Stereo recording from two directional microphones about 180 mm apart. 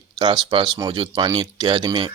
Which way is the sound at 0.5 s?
25° right (ahead or behind).